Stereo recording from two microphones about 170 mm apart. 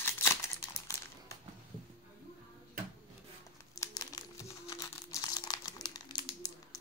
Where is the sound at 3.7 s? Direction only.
20° left (ahead or behind).